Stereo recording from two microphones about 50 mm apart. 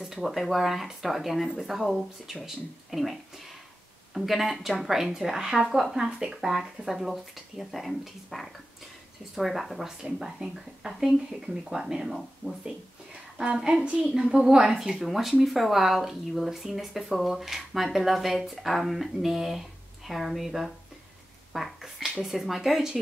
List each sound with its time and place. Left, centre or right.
0.0 s speech: centre
12.4 s speech: right
13.4 s speech: centre